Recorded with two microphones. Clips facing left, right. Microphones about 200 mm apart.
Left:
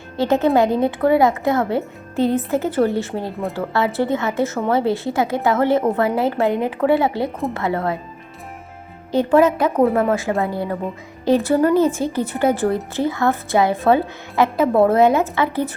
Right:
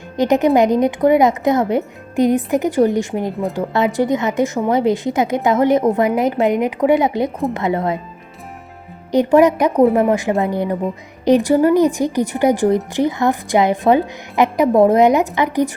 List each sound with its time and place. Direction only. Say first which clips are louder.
0.2 s a woman's voice: right 3 dB; 15° right (ahead or behind)
9.1 s a woman's voice: right 3 dB; 15° right (ahead or behind)